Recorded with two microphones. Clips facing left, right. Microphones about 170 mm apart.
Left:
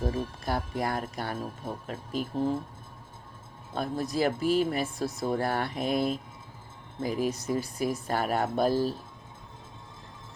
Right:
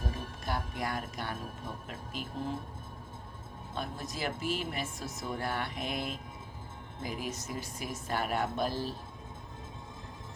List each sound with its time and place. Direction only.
0.0 s speech: 35° left (ahead or behind)
3.8 s speech: 35° left (ahead or behind)